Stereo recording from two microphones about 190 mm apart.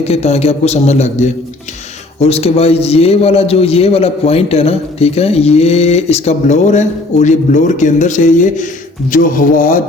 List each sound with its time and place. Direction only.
0.0 s a man's voice: 35° left (ahead or behind)